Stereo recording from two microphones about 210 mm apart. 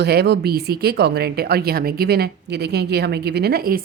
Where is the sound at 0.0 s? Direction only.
50° right (ahead or behind).